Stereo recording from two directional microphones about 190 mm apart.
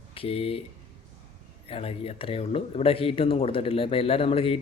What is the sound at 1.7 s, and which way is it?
Speech, 30° left (ahead or behind).